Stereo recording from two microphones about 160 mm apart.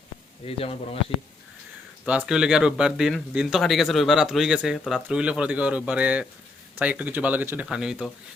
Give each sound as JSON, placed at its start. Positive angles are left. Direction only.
{"t": 0.4, "sound": "a man's voice", "side_deg": 35}
{"t": 2.0, "sound": "speech", "side_deg": -5}